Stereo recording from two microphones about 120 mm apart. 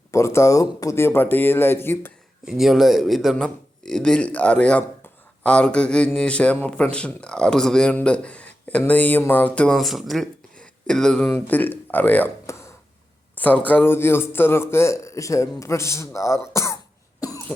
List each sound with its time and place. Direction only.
0.1 s a man's voice: 25° left (ahead or behind)
2.4 s a man's voice: 5° right (ahead or behind); by 12.3 s 15° left (ahead or behind)
12.5 s a sound: 25° left (ahead or behind)
13.3 s a man's voice: 15° left (ahead or behind)
17.2 s cough: 30° left (ahead or behind)